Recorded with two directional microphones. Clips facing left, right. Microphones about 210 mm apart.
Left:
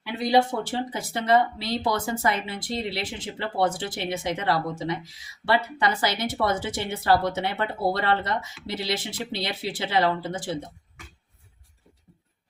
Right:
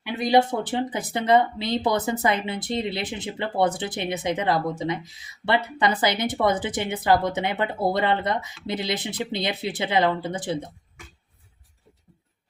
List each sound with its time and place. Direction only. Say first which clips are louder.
0.0 s speech: right 2 dB; 20° right (ahead or behind)